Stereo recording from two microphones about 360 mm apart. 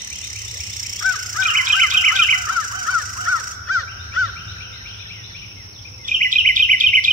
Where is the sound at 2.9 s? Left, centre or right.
Left.